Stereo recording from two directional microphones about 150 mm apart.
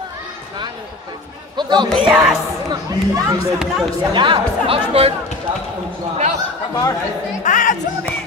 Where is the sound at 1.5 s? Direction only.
30° right (ahead or behind).